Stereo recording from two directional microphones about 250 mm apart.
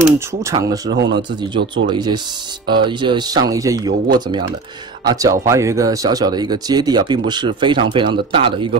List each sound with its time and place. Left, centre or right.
0.3 s speech: centre
0.9 s speech: right
1.9 s speech: centre